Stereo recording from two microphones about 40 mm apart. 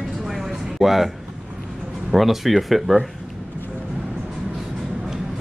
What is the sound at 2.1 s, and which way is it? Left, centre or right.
Speech, centre.